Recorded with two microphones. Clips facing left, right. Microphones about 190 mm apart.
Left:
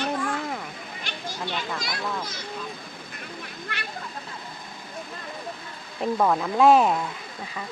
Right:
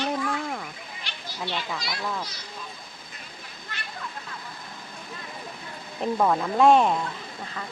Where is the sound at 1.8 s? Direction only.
50° left (ahead or behind).